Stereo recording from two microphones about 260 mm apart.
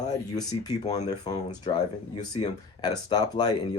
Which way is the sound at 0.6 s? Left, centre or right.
Centre.